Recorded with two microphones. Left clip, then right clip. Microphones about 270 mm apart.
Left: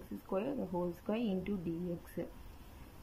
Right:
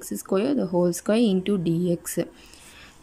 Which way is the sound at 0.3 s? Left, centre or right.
Right.